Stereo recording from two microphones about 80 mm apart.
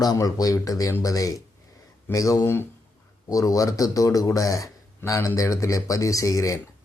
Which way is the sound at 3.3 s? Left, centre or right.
Left.